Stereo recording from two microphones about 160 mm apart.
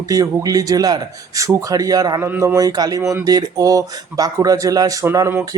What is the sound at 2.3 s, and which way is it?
Speech, 10° right (ahead or behind).